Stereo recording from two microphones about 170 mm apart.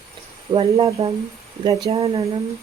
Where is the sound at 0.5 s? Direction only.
30° right (ahead or behind).